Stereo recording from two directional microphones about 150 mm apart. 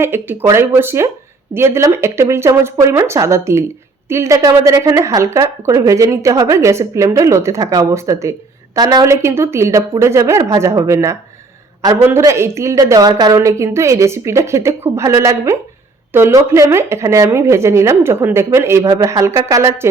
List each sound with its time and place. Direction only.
0.0 s a man's voice: 15° right (ahead or behind)